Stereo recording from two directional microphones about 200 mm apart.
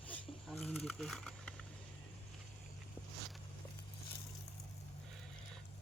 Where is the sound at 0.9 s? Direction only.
Centre (ahead or behind).